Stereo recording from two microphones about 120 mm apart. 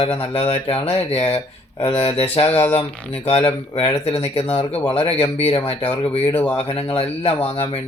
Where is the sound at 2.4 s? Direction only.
55° left (ahead or behind).